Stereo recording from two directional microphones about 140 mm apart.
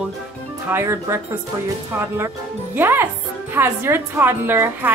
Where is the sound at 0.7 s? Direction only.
20° right (ahead or behind).